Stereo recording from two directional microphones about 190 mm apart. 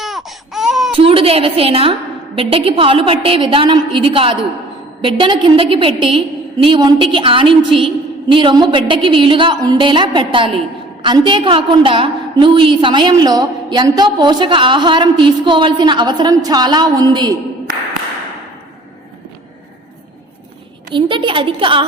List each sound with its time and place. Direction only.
0.0 s baby cry: centre (ahead or behind)
0.9 s a woman's voice: 30° right (ahead or behind)
20.9 s a woman's voice: 25° right (ahead or behind)